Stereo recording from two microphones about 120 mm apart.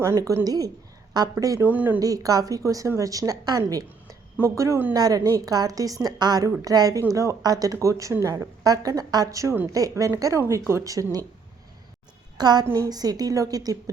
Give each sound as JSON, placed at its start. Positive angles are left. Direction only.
{"t": 0.0, "sound": "speech", "side_deg": -25}
{"t": 1.6, "sound": "speech", "side_deg": -15}
{"t": 2.0, "sound": "speech", "side_deg": -30}
{"t": 4.9, "sound": "a woman's voice", "side_deg": -30}
{"t": 12.4, "sound": "a woman's voice", "side_deg": -35}